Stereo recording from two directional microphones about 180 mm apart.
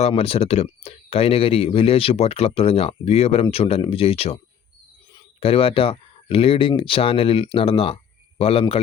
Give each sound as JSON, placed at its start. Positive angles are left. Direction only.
{"t": 0.0, "sound": "speech", "side_deg": 35}
{"t": 5.4, "sound": "speech", "side_deg": 30}